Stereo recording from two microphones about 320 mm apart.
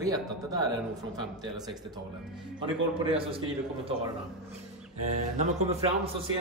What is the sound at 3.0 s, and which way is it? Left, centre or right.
Speech, centre.